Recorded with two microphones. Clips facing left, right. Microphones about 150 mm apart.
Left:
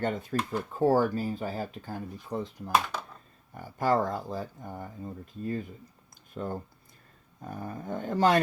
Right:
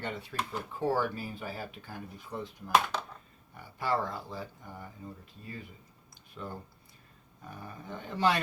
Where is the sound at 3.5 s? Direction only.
45° left (ahead or behind).